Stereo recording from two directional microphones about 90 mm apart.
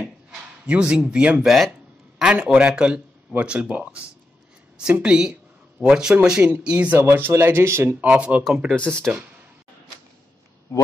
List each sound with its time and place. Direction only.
0.7 s speech: 10° right (ahead or behind)
7.0 s speech: 25° right (ahead or behind)
8.0 s speech: 15° right (ahead or behind)
8.7 s speech: 10° left (ahead or behind)